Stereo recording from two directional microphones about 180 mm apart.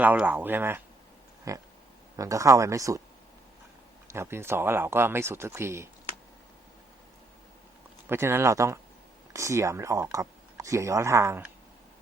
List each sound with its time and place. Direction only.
0.0 s speech: 10° right (ahead or behind)
4.1 s speech: 15° right (ahead or behind)
8.0 s speech: 15° right (ahead or behind)